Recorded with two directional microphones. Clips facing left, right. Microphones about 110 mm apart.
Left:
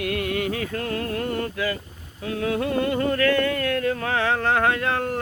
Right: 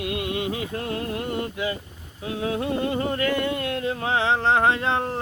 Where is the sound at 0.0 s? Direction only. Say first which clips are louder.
Left 2 dB; 20° right (ahead or behind).